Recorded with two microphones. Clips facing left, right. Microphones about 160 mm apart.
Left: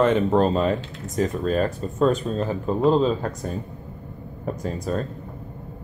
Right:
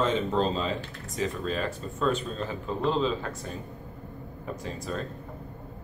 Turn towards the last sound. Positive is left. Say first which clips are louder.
# left 7 dB
turn(degrees=45)  # may be behind; listen again after turning